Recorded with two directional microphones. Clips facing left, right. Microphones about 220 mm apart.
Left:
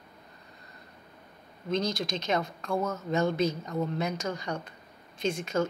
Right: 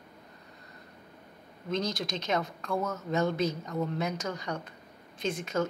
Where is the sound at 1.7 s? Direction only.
45° right (ahead or behind).